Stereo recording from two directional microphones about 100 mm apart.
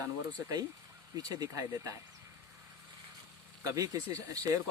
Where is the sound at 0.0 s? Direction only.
30° right (ahead or behind).